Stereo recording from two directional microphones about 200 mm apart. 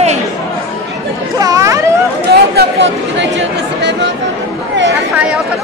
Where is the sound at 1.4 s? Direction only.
15° right (ahead or behind).